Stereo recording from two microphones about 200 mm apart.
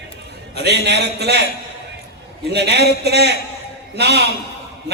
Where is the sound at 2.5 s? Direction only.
55° right (ahead or behind).